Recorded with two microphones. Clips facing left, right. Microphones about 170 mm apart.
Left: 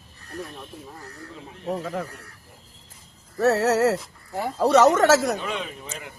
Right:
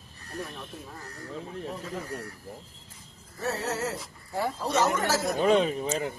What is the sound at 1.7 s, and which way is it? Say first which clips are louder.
Speech: left 13 dB; 65° left (ahead or behind).